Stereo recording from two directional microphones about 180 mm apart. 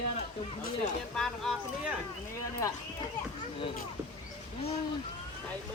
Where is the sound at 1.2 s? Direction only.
Centre (ahead or behind).